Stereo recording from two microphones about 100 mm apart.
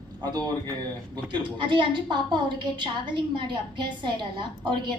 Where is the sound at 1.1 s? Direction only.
50° right (ahead or behind).